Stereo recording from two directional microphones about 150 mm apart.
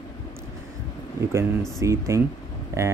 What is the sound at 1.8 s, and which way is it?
Speech, 20° right (ahead or behind).